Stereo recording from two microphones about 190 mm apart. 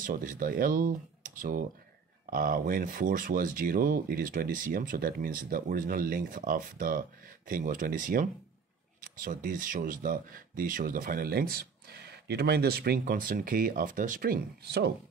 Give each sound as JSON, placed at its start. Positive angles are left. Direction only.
{"t": 0.0, "sound": "speech", "side_deg": -45}